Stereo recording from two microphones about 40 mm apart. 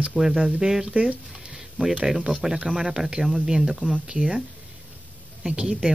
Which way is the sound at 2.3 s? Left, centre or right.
Centre.